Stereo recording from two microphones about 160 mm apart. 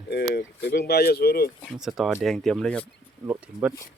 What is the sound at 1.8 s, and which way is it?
Speech, centre (ahead or behind).